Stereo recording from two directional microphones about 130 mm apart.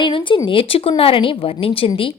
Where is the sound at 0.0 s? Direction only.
40° left (ahead or behind).